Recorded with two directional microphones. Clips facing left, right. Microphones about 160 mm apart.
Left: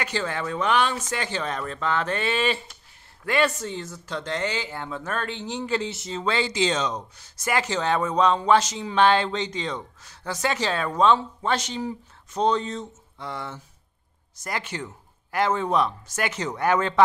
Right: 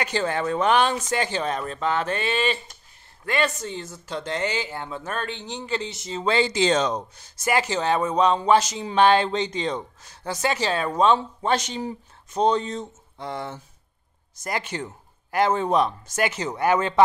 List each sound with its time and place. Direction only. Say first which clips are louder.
0.2 s speech: right 6 dB; 30° right (ahead or behind)
0.9 s speech: right 4 dB; 15° right (ahead or behind); by 6.1 s 5° left (ahead or behind)
6.1 s speech: right 4 dB; 20° right (ahead or behind)
6.5 s speech: right 3 dB; 40° right (ahead or behind)
7.4 s speech: right 2 dB; 10° right (ahead or behind)
14.4 s speech: right 2 dB; 20° right (ahead or behind)